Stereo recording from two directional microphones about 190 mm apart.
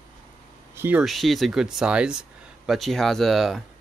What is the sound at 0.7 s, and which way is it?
Speech, 10° right (ahead or behind).